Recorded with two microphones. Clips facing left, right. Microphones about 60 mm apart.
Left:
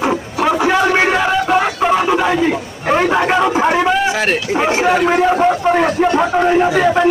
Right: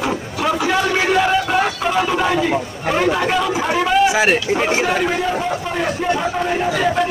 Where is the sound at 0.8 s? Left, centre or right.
Left.